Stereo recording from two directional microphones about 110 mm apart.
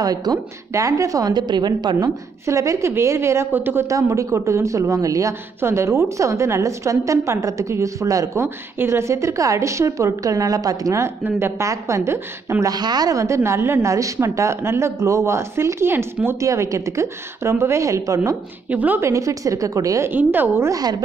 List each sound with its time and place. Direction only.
0.0 s a woman's voice: 35° right (ahead or behind)
2.4 s a woman's voice: 30° right (ahead or behind)
12.7 s a woman's voice: 40° right (ahead or behind)
18.7 s a woman's voice: 15° right (ahead or behind)
18.9 s a woman's voice: 30° right (ahead or behind)
20.1 s a woman's voice: 20° right (ahead or behind)
20.7 s a woman's voice: 35° right (ahead or behind)